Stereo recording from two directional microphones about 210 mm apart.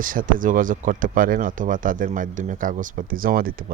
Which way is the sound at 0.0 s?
40° right (ahead or behind).